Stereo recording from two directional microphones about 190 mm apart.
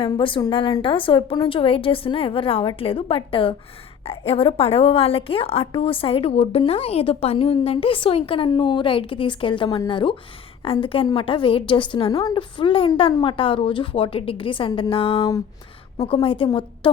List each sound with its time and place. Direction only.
0.0 s a woman's voice: 25° left (ahead or behind)